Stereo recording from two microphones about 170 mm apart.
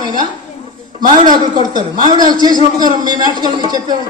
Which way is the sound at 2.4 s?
25° right (ahead or behind).